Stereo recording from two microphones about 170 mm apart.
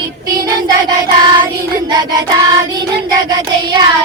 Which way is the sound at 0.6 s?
25° right (ahead or behind).